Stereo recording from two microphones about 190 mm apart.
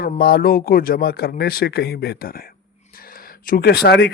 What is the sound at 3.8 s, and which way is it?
Speech, 60° left (ahead or behind).